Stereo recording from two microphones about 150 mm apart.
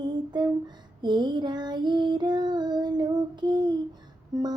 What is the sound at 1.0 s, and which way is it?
Child singing, 30° right (ahead or behind).